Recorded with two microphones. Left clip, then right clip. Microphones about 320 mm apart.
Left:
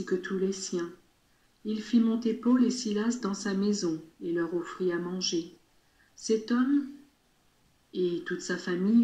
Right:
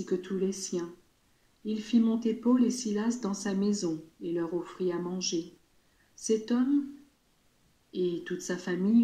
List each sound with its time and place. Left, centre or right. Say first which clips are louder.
0.0 s speech: left 1 dB; centre
7.9 s speech: left 1 dB; centre